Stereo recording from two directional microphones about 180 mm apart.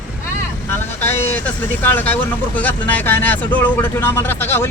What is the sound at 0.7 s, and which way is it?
Vehicle, 10° left (ahead or behind).